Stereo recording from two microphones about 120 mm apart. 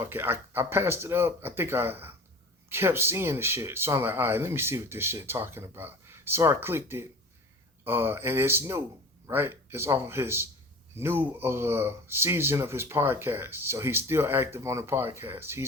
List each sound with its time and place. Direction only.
0.0 s speech: 20° right (ahead or behind)